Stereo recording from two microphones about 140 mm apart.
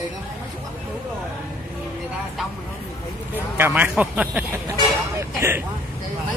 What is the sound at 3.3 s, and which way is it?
Speech, 15° right (ahead or behind).